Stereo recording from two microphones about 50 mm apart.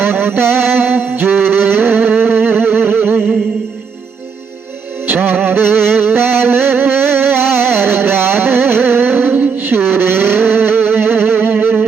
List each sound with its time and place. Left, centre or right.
0.0 s music: right
5.0 s music: right
9.3 s a sound: right
9.6 s music: right